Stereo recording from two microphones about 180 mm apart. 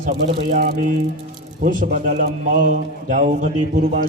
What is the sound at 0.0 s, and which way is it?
A man's voice, 45° right (ahead or behind).